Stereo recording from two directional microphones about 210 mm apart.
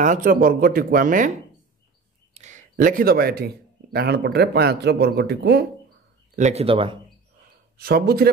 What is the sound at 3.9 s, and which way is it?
A man's voice, 50° right (ahead or behind).